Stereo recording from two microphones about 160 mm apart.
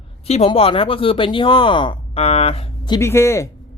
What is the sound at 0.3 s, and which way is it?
Speech, 40° left (ahead or behind).